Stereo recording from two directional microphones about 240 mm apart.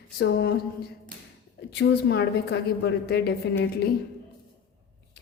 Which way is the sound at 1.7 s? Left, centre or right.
Left.